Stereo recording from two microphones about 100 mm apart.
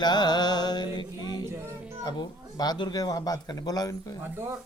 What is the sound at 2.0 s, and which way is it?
Speech, 45° left (ahead or behind).